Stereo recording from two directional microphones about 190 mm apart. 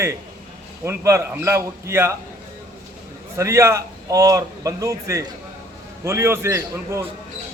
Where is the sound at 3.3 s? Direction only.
15° right (ahead or behind).